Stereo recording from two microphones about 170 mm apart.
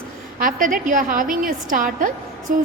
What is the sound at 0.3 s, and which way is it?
A woman's voice, 50° right (ahead or behind).